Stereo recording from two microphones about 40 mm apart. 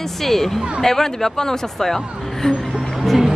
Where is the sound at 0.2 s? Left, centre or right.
Centre.